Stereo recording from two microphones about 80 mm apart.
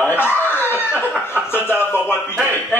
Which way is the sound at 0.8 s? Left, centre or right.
Left.